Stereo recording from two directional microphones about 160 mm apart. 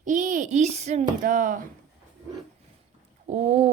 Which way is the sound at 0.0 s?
55° right (ahead or behind).